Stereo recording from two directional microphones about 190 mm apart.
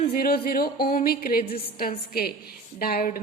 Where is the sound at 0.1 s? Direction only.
50° left (ahead or behind).